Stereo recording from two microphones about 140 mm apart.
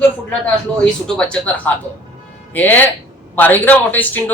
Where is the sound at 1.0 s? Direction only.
5° left (ahead or behind).